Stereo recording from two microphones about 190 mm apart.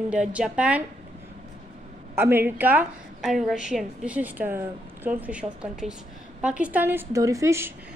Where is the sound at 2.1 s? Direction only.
10° right (ahead or behind).